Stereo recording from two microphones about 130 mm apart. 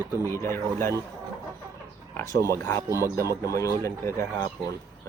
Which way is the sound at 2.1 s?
25° left (ahead or behind).